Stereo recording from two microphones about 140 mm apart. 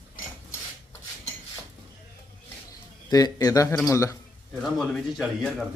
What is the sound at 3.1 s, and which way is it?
A man's voice, 25° left (ahead or behind).